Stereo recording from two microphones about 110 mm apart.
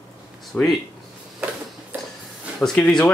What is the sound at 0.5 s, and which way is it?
Speech, 15° left (ahead or behind).